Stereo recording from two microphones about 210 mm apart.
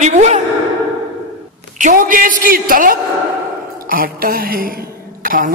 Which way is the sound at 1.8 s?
40° right (ahead or behind).